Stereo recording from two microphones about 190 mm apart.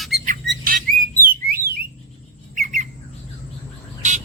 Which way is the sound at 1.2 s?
50° right (ahead or behind).